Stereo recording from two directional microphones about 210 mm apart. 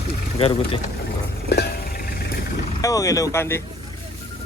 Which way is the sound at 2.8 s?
15° left (ahead or behind).